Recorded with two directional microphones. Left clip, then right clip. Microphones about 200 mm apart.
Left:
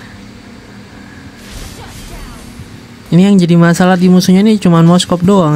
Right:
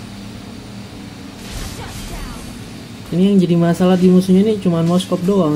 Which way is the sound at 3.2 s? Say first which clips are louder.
Left 5 dB; 60° left (ahead or behind).